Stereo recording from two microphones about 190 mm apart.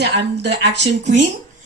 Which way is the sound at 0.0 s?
65° right (ahead or behind).